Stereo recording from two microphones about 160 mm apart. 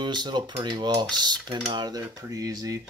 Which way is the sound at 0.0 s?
30° right (ahead or behind).